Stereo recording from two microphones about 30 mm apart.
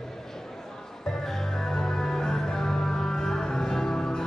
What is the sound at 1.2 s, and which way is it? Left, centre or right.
Music, centre.